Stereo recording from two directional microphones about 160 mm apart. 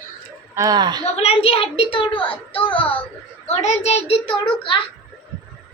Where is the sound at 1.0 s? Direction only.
40° left (ahead or behind).